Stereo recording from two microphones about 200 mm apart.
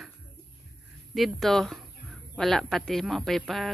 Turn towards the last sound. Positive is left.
turn(degrees=0)  # may be behind; listen again after turning